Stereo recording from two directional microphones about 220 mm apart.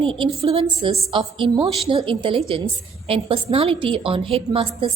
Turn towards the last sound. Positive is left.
turn(degrees=-25)  # may be behind; listen again after turning